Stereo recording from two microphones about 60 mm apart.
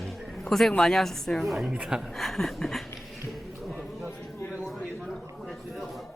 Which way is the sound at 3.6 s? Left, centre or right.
Centre.